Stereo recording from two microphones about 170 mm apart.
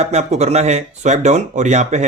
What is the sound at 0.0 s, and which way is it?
Speech, 40° right (ahead or behind).